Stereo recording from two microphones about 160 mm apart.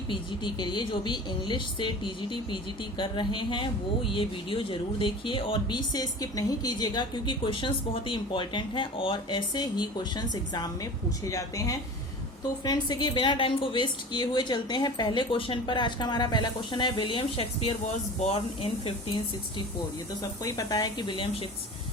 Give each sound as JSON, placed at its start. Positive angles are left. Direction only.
{"t": 0.1, "sound": "speech", "side_deg": 30}
{"t": 11.3, "sound": "speech", "side_deg": 20}